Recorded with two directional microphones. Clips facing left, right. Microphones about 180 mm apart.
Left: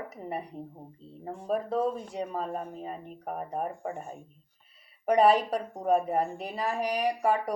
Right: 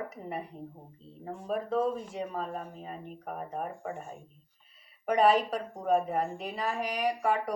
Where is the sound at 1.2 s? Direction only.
35° left (ahead or behind).